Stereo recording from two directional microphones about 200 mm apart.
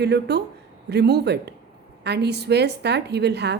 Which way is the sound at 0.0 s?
55° right (ahead or behind).